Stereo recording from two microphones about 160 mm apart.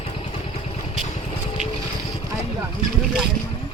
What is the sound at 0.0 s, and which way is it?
Vehicle, 35° left (ahead or behind).